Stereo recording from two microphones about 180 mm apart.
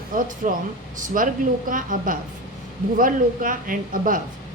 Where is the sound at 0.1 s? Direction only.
50° right (ahead or behind).